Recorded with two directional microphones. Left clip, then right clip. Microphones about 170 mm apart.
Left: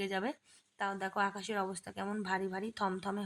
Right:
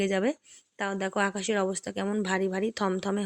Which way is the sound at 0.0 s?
30° right (ahead or behind).